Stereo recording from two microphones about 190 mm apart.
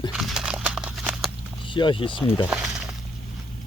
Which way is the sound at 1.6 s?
25° left (ahead or behind).